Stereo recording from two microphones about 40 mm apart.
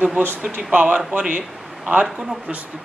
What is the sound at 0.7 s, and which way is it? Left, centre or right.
Speech, right.